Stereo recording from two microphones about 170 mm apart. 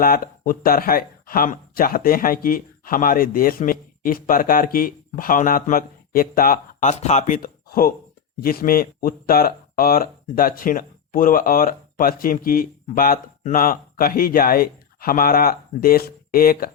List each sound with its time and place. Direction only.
0.0 s speech: 55° left (ahead or behind)